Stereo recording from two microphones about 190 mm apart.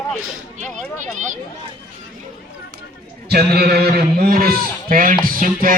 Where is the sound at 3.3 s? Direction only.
60° right (ahead or behind).